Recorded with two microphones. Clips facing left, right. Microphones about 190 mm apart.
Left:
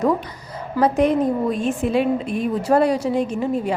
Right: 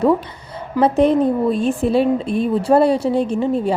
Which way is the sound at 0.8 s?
30° right (ahead or behind).